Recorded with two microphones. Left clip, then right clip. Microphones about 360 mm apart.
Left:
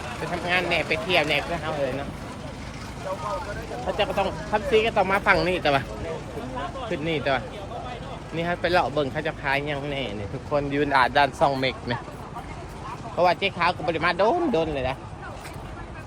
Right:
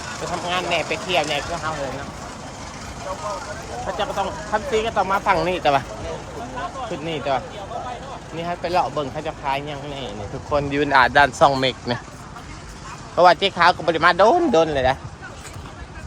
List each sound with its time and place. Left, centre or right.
0.3 s speech: centre
3.9 s speech: centre
10.5 s speech: right
13.1 s speech: centre